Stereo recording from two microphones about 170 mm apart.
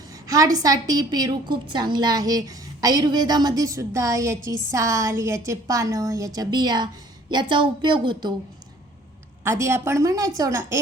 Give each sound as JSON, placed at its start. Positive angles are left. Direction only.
{"t": 0.1, "sound": "a woman's voice", "side_deg": -20}
{"t": 9.4, "sound": "a woman's voice", "side_deg": -15}